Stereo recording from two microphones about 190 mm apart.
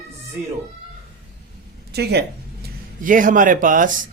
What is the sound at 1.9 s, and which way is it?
Speech, 60° right (ahead or behind).